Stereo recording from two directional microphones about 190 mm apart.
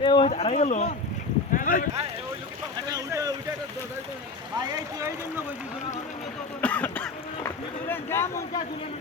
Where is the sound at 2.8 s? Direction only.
20° right (ahead or behind).